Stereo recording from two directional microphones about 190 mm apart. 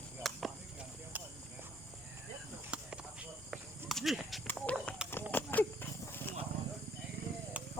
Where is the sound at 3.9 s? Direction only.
Centre (ahead or behind).